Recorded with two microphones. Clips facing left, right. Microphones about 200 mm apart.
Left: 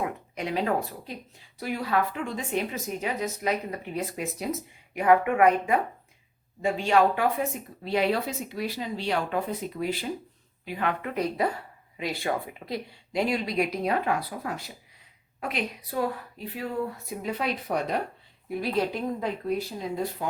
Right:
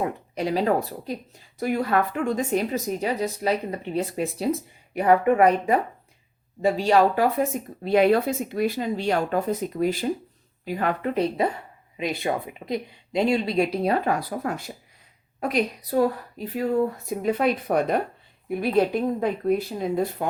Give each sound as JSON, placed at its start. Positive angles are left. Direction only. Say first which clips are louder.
{"t": 0.0, "sound": "speech", "louder": "right 5 dB", "side_deg": -35}
{"t": 1.5, "sound": "speech", "louder": "right 5 dB", "side_deg": -50}
{"t": 7.9, "sound": "speech", "louder": "right 7 dB", "side_deg": -50}
{"t": 11.1, "sound": "speech", "louder": "right 4 dB", "side_deg": -25}
{"t": 17.2, "sound": "speech", "louder": "right 7 dB", "side_deg": -50}